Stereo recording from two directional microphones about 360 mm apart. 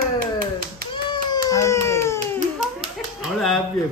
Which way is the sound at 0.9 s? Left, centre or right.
Centre.